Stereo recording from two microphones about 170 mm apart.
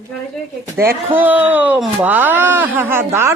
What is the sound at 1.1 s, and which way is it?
Speech, 10° right (ahead or behind).